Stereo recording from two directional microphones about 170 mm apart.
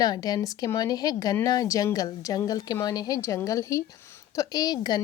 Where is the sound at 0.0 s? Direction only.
20° left (ahead or behind).